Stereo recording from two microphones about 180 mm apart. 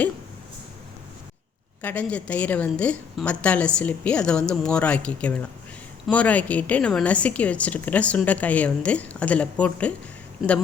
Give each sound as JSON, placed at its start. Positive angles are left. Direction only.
{"t": 1.8, "sound": "a woman's voice", "side_deg": 10}